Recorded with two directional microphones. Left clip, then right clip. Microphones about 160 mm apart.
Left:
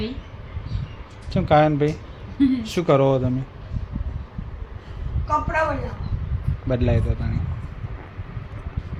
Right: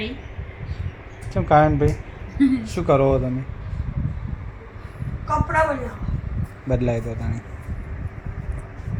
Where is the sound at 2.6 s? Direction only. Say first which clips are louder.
Left 1 dB; 20° left (ahead or behind).